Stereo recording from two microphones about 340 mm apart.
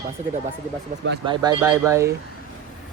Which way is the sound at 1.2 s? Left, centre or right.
Centre.